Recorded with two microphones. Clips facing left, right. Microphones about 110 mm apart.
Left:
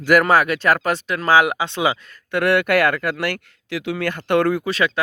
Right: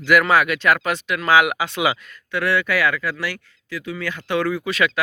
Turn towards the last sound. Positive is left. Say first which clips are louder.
# left 1 dB
turn(degrees=30)  # may be behind; listen again after turning